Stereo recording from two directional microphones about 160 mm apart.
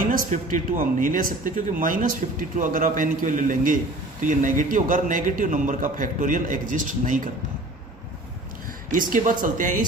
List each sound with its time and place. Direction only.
0.0 s a man's voice: 60° right (ahead or behind)
9.1 s a man's voice: 55° right (ahead or behind)